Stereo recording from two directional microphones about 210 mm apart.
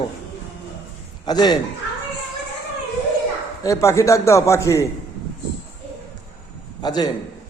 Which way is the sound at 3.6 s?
15° left (ahead or behind).